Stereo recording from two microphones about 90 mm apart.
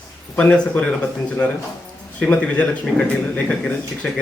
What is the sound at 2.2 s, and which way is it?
Speech, 15° left (ahead or behind).